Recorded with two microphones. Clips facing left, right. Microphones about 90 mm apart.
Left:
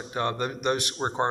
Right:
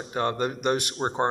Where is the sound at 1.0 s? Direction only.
Centre (ahead or behind).